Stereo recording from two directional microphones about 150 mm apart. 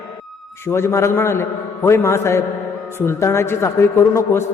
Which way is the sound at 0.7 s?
20° left (ahead or behind).